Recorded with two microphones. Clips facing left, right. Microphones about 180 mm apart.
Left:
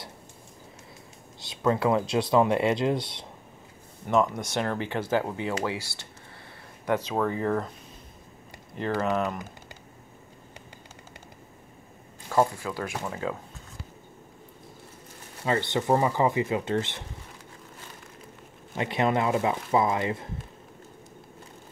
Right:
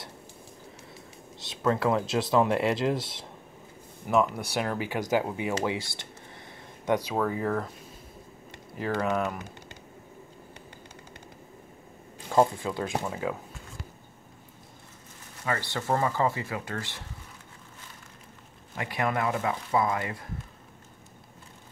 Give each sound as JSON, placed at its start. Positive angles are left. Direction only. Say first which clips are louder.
{"t": 1.4, "sound": "speech", "louder": "left 1 dB", "side_deg": 0}
{"t": 4.6, "sound": "speech", "louder": "left 1 dB", "side_deg": -10}
{"t": 6.9, "sound": "speech", "louder": "even", "side_deg": -10}
{"t": 8.8, "sound": "speech", "louder": "left 1 dB", "side_deg": -5}
{"t": 12.3, "sound": "speech", "louder": "right 1 dB", "side_deg": -20}
{"t": 15.4, "sound": "speech", "louder": "left 5 dB", "side_deg": 20}
{"t": 18.8, "sound": "speech", "louder": "left 4 dB", "side_deg": 25}